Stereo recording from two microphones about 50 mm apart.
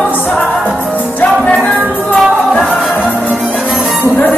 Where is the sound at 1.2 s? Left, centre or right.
Left.